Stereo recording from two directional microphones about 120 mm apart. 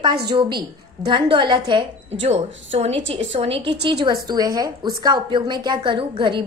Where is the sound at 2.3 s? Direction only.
60° right (ahead or behind).